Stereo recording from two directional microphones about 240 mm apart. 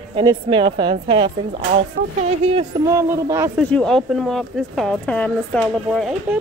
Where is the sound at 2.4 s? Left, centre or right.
Right.